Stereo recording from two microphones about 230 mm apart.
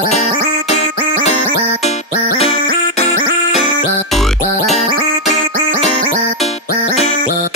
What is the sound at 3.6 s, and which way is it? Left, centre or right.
Music, centre.